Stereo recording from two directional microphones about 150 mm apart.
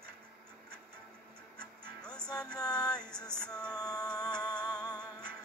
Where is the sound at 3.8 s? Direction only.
25° left (ahead or behind).